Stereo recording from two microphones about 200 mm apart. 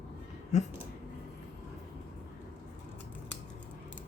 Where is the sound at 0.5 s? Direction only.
35° left (ahead or behind).